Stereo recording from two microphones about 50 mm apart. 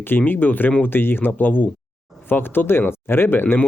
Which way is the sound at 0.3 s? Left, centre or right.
Left.